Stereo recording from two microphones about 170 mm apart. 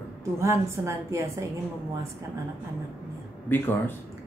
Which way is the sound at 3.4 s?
10° left (ahead or behind).